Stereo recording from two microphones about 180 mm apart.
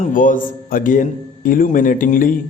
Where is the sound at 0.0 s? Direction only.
50° left (ahead or behind).